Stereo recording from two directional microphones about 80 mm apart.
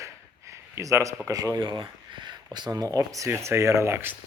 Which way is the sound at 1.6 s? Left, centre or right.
Right.